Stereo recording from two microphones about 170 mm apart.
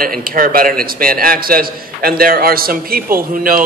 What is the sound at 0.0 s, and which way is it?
A man's voice, 55° right (ahead or behind).